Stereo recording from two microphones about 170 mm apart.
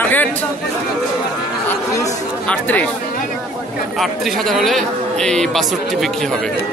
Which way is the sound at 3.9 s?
Centre (ahead or behind).